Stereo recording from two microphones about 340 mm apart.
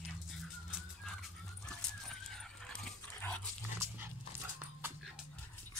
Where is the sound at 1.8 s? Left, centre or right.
Centre.